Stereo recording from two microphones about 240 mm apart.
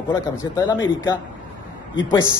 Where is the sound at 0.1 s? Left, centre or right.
Centre.